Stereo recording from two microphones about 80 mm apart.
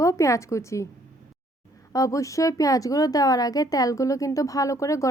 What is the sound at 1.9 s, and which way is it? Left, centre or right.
A woman's voice, left.